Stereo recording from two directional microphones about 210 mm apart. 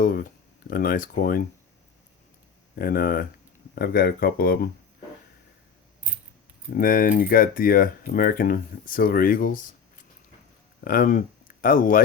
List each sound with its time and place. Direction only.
0.7 s speech: 45° left (ahead or behind)
2.7 s speech: 45° left (ahead or behind)
6.7 s speech: 40° left (ahead or behind)
10.8 s speech: 40° left (ahead or behind)